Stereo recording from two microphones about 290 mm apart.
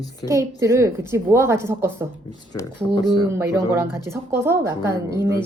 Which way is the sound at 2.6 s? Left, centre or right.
Centre.